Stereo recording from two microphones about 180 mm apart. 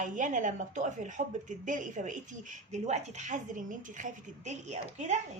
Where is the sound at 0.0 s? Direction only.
45° right (ahead or behind).